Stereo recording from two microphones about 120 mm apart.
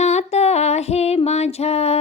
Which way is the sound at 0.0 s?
70° left (ahead or behind).